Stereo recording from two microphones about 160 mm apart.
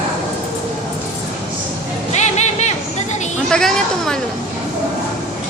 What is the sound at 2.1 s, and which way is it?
Music, 45° left (ahead or behind).